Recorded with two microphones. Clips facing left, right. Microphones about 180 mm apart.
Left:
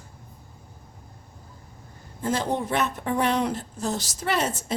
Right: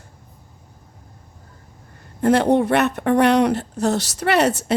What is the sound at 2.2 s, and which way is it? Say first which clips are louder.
Speech: right 10 dB; 65° right (ahead or behind).